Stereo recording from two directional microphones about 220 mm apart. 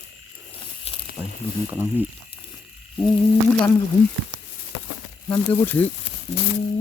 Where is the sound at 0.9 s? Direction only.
25° left (ahead or behind).